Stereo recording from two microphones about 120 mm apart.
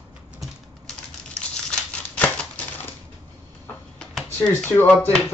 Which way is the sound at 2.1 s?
10° left (ahead or behind).